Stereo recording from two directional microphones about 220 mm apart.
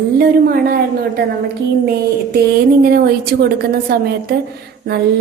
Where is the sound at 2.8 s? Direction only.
45° right (ahead or behind).